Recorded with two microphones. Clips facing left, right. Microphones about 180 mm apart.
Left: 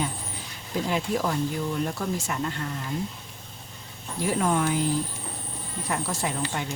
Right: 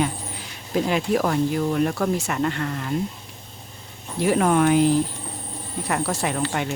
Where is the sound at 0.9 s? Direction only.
70° right (ahead or behind).